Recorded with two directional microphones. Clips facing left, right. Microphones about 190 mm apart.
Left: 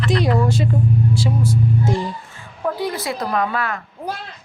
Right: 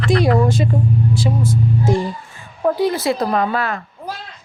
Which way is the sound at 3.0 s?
30° right (ahead or behind).